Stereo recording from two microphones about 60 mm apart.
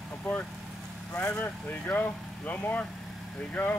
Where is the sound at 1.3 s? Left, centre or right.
Left.